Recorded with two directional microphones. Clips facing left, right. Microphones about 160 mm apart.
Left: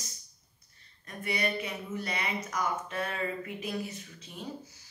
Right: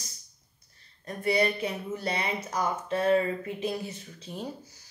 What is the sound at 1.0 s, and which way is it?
Speech, 35° right (ahead or behind).